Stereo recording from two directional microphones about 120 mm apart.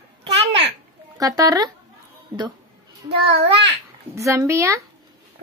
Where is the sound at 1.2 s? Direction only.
30° right (ahead or behind).